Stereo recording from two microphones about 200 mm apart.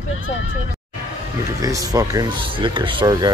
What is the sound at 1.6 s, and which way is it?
Speech, 15° right (ahead or behind).